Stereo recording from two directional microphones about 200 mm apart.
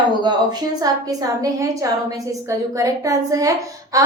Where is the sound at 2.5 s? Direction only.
15° right (ahead or behind).